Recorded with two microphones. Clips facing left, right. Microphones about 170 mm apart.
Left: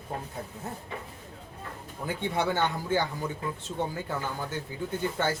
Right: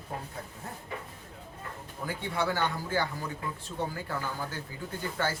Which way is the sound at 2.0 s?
20° left (ahead or behind).